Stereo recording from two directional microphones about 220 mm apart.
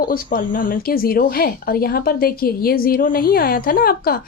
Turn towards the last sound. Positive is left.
turn(degrees=45)  # may be behind; listen again after turning